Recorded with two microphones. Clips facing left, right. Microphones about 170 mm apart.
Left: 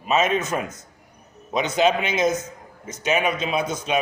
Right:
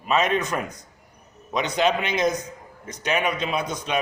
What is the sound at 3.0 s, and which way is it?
Speech, 25° left (ahead or behind).